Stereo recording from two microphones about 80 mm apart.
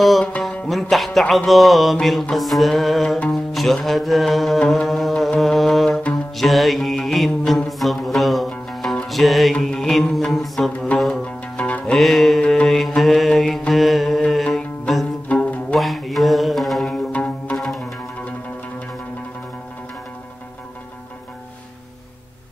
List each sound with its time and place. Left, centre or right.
0.0 s music: centre
6.3 s mantra: centre
11.2 s music: centre
12.4 s mantra: centre
15.2 s music: centre
15.8 s mantra: centre
17.1 s music: centre
17.6 s music: centre